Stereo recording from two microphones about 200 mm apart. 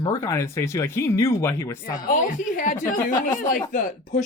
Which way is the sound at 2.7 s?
20° left (ahead or behind).